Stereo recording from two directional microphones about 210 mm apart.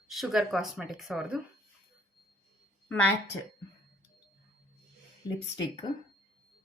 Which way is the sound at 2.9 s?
10° left (ahead or behind).